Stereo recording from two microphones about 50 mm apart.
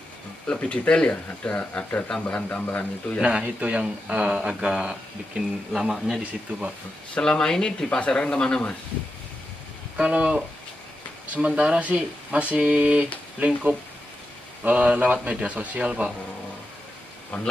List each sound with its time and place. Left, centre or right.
0.5 s speech: left
3.2 s speech: right
5.7 s speech: centre
7.2 s speech: centre
9.9 s speech: right
17.3 s speech: left